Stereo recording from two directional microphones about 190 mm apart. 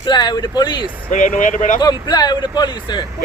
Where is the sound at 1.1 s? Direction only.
40° left (ahead or behind).